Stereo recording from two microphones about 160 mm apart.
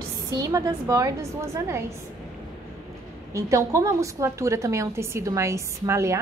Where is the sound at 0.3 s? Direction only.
20° right (ahead or behind).